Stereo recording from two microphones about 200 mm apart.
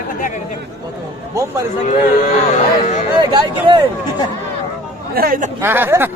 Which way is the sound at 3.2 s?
20° right (ahead or behind).